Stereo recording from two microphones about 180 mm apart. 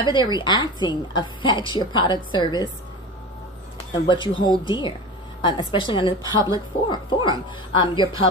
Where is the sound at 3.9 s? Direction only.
25° left (ahead or behind).